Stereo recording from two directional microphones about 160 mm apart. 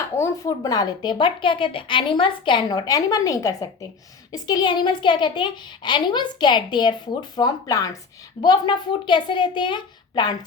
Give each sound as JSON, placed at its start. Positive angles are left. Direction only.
{"t": 0.2, "sound": "a woman's voice", "side_deg": 20}